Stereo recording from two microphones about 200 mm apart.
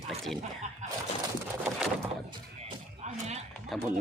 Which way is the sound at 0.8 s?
40° right (ahead or behind).